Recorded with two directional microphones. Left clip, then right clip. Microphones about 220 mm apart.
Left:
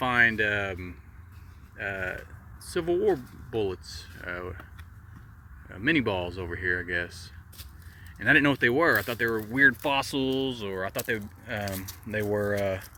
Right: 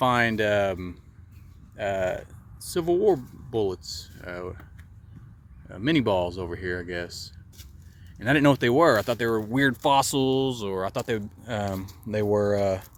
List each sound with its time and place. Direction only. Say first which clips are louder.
0.0 s speech: right 1 dB; 15° right (ahead or behind)
5.6 s speech: right 2 dB; 15° right (ahead or behind)
8.2 s speech: even; 15° right (ahead or behind)